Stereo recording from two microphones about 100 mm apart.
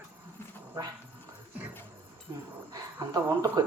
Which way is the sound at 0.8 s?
40° right (ahead or behind).